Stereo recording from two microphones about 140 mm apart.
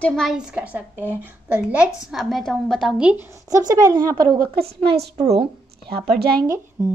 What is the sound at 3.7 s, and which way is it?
Speech, 25° right (ahead or behind).